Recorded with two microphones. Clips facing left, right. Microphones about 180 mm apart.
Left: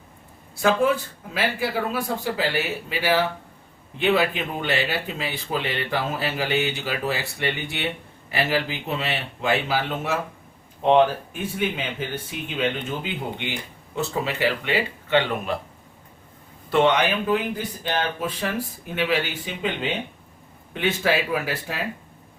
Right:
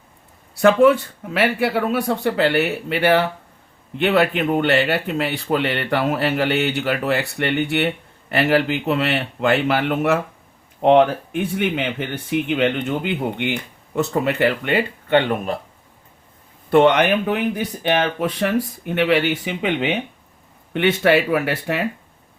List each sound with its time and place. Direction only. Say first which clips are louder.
0.6 s speech: right 7 dB; 65° right (ahead or behind); by 15.5 s 50° right (ahead or behind)
16.7 s speech: right 5 dB; 60° right (ahead or behind)